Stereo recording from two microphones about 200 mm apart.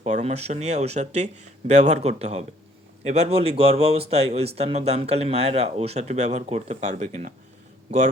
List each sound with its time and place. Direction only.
0.0 s speech: 35° right (ahead or behind)